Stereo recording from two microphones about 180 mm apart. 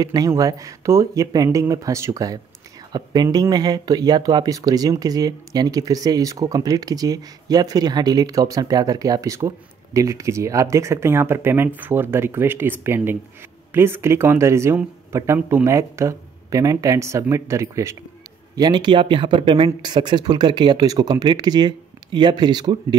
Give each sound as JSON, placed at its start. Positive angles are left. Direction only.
{"t": 0.0, "sound": "speech", "side_deg": -20}